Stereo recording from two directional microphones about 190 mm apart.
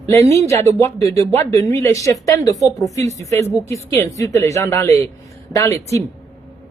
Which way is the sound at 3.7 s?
15° left (ahead or behind).